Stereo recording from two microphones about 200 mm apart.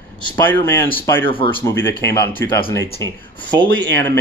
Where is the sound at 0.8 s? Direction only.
15° left (ahead or behind).